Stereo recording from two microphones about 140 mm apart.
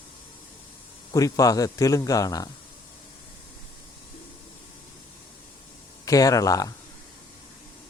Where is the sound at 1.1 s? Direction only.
25° left (ahead or behind).